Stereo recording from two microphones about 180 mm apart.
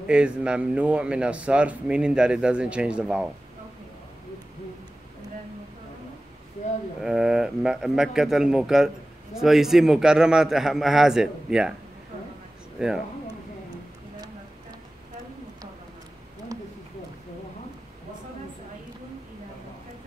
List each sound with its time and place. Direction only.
0.0 s speech: 5° right (ahead or behind)
7.0 s speech: 5° right (ahead or behind)
12.7 s speech: 5° right (ahead or behind)
16.5 s a sound: 20° right (ahead or behind)